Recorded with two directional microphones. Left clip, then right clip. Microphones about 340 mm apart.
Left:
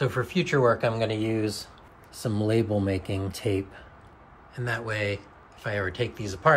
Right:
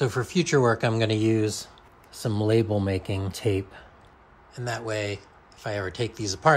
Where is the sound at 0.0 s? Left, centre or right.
Centre.